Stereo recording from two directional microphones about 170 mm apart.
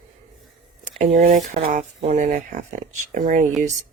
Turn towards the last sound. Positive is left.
turn(degrees=-50)  # may be behind; listen again after turning